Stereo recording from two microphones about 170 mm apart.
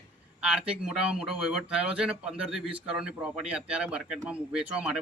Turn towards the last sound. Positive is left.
turn(degrees=-5)  # may be behind; listen again after turning